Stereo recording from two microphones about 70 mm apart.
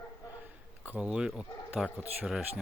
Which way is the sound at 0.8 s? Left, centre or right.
Centre.